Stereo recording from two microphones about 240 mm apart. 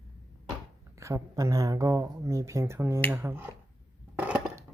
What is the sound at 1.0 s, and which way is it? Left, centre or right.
Speech, centre.